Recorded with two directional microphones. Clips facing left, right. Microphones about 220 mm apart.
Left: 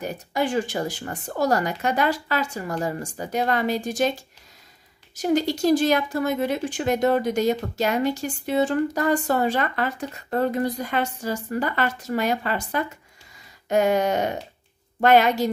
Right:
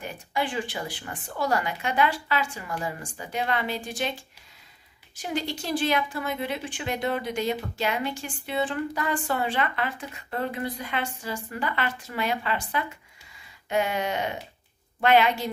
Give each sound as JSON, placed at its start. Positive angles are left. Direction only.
{"t": 0.0, "sound": "speech", "side_deg": 40}